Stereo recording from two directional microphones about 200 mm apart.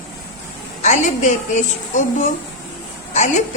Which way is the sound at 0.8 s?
35° left (ahead or behind).